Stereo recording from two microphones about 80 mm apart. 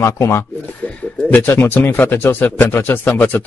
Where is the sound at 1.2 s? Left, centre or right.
Left.